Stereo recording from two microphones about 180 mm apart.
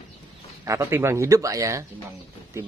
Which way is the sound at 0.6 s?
15° right (ahead or behind).